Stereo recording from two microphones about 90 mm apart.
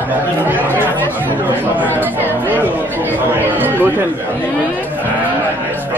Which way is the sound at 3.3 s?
20° right (ahead or behind).